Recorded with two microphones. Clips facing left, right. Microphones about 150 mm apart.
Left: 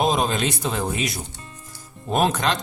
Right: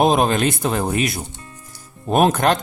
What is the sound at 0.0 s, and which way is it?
A man's voice, 55° right (ahead or behind).